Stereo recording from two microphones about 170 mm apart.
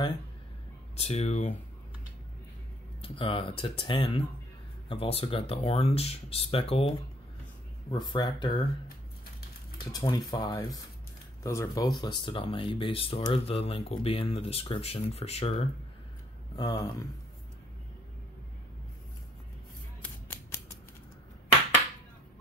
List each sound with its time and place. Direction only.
0.9 s speech: 40° left (ahead or behind)
3.0 s speech: 30° left (ahead or behind)
9.9 s speech: 20° left (ahead or behind)
16.5 s speech: 20° left (ahead or behind)
20.0 s scissors: 15° left (ahead or behind)